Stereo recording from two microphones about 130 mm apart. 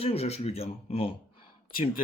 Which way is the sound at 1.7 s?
90° left.